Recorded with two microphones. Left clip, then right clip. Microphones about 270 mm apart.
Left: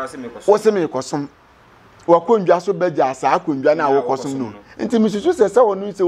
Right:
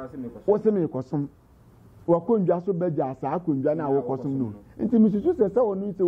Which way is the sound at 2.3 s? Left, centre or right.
Centre.